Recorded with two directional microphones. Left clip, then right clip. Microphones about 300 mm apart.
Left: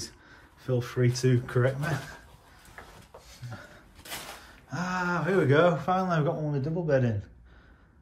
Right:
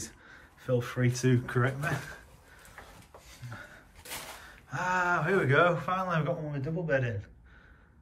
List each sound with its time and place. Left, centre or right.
0.0 s speech: centre
4.6 s speech: centre